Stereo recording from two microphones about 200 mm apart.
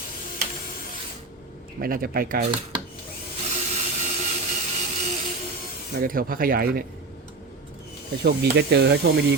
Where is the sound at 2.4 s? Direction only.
25° right (ahead or behind).